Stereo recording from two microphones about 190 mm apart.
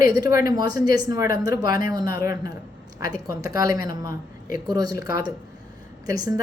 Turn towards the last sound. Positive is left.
turn(degrees=-20)  # may be behind; listen again after turning